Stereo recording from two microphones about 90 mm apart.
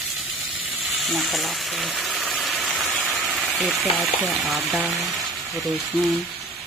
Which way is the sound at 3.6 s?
Centre (ahead or behind).